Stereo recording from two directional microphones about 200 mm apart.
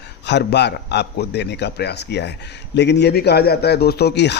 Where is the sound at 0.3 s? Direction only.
60° left (ahead or behind).